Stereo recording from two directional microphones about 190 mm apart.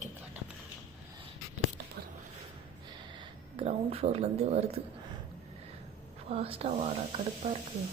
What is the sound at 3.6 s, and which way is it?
Speech, 30° right (ahead or behind).